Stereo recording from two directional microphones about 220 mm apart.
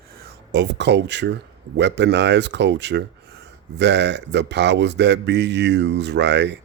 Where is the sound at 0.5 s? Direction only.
50° right (ahead or behind).